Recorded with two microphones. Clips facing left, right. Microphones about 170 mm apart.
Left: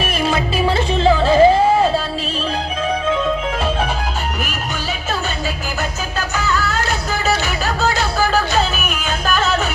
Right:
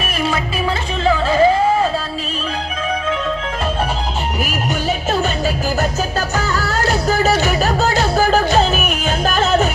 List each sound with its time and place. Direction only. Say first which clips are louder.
0.0 s music: left 1 dB; 25° left (ahead or behind)
6.1 s music: right 1 dB; 40° right (ahead or behind)